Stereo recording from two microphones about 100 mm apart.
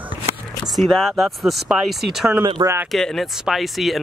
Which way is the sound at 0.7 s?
Centre (ahead or behind).